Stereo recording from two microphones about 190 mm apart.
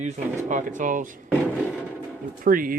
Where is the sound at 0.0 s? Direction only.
40° right (ahead or behind).